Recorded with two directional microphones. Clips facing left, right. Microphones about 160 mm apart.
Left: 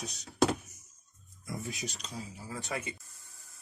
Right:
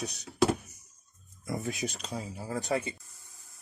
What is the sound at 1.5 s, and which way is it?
Speech, 55° right (ahead or behind).